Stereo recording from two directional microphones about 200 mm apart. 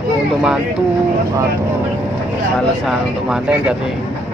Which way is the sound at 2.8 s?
5° right (ahead or behind).